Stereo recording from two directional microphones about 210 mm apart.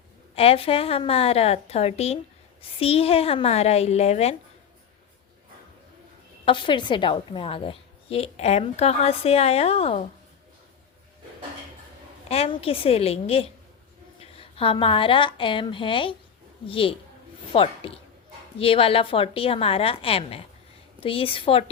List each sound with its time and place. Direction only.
0.3 s a woman's voice: 25° left (ahead or behind)
6.4 s a woman's voice: 25° left (ahead or behind)
12.3 s a woman's voice: 30° left (ahead or behind)